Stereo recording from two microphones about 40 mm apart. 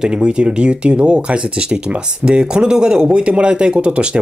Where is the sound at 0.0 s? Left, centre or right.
Right.